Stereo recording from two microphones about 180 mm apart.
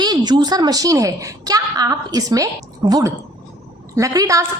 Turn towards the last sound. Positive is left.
turn(degrees=-20)  # may be behind; listen again after turning